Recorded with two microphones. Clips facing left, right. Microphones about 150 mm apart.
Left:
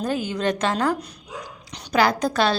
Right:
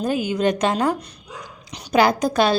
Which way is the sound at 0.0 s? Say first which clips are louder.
Right 3 dB; 15° right (ahead or behind).